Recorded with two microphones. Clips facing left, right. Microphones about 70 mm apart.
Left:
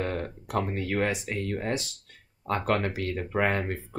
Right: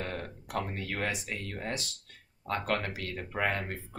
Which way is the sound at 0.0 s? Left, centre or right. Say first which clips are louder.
Left 6 dB; left.